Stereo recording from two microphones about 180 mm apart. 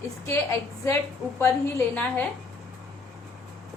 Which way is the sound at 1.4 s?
10° left (ahead or behind).